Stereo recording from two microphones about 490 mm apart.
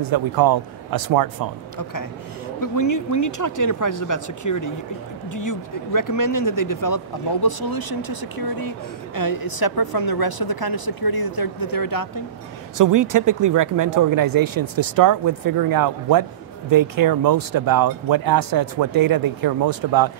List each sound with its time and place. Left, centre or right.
0.0 s speech: right
2.6 s speech: left
12.7 s speech: right